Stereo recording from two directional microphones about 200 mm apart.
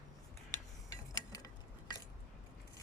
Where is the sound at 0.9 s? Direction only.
20° left (ahead or behind).